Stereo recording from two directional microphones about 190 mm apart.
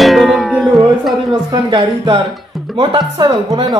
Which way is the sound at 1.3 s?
25° right (ahead or behind).